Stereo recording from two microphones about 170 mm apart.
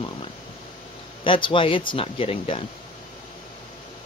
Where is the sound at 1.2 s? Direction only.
30° left (ahead or behind).